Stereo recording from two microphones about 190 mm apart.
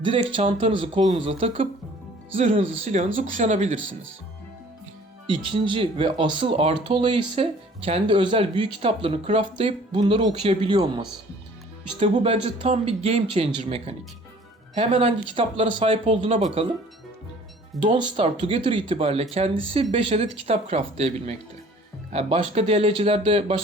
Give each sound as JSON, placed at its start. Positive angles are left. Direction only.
{"t": 0.0, "sound": "speech", "side_deg": -25}
{"t": 5.2, "sound": "speech", "side_deg": -25}
{"t": 17.9, "sound": "speech", "side_deg": -25}